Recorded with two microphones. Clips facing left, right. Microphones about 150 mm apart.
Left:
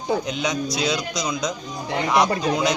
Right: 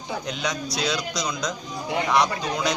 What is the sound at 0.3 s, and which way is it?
Speech, 5° left (ahead or behind).